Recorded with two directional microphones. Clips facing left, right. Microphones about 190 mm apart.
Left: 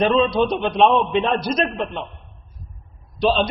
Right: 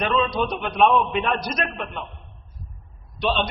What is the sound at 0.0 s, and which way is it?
A man's voice, 30° left (ahead or behind).